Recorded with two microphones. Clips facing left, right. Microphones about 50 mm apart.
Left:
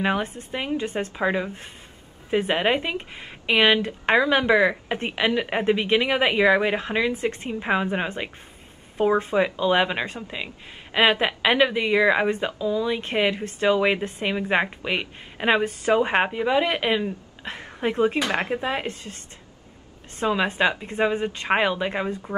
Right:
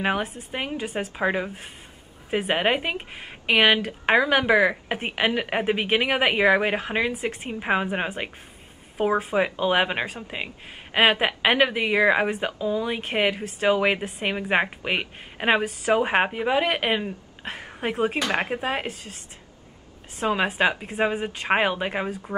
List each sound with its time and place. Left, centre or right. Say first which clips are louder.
0.0 s speech: left 1 dB; centre
3.8 s speech: even; centre
9.4 s speech: even; centre
10.3 s speech: even; centre
13.0 s speech: left 1 dB; centre
15.3 s speech: left 1 dB; centre
20.2 s speech: even; centre